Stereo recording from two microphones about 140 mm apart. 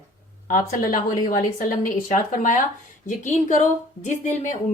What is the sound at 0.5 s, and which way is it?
Speech, 80° left.